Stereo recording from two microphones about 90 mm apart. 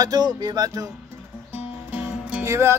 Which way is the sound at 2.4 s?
30° right (ahead or behind).